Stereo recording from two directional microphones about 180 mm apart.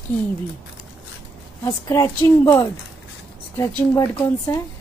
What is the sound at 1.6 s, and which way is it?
A woman's voice, 15° left (ahead or behind).